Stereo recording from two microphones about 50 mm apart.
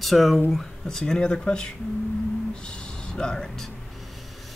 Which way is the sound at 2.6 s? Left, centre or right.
Centre.